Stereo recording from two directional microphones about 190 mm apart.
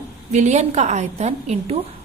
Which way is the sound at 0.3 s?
35° right (ahead or behind).